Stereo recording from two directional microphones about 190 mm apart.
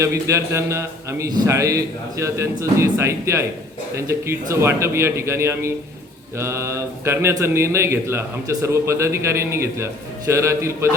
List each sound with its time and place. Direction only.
0.0 s speech: 15° right (ahead or behind)